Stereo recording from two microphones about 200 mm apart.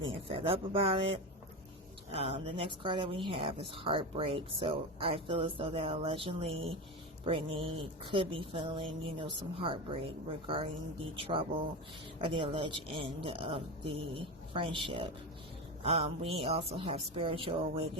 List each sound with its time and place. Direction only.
0.1 s speech: 25° right (ahead or behind)
2.1 s speech: 30° right (ahead or behind)